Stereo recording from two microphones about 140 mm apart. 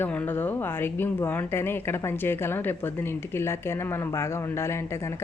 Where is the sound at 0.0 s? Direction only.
10° left (ahead or behind).